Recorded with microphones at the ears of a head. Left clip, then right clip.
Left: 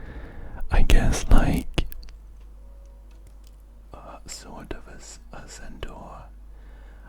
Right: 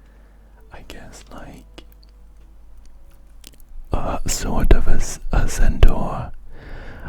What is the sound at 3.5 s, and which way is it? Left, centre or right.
Speech, right.